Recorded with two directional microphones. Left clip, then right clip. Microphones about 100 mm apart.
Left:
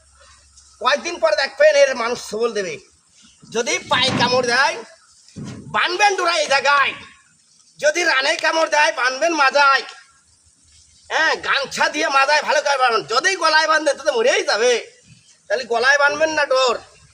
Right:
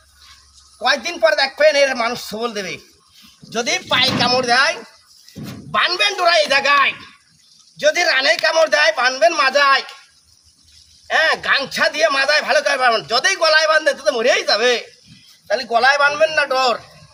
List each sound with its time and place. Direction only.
0.8 s a man's voice: 25° left (ahead or behind); by 9.8 s 45° left (ahead or behind)
11.1 s speech: 35° left (ahead or behind)
15.4 s a man's voice: 30° left (ahead or behind)